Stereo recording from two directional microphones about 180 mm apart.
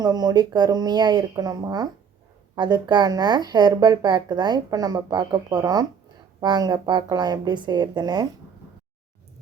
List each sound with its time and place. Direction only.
0.0 s speech: 20° right (ahead or behind)